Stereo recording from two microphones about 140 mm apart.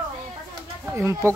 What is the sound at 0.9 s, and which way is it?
Speech, 20° right (ahead or behind).